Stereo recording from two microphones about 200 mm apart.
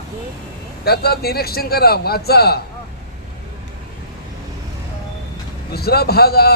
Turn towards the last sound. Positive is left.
turn(degrees=50)  # may be behind; listen again after turning